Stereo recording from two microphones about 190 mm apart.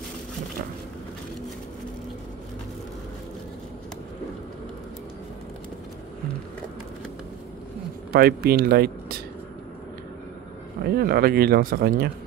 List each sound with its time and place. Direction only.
8.1 s speech: 55° right (ahead or behind)
10.8 s speech: 55° right (ahead or behind)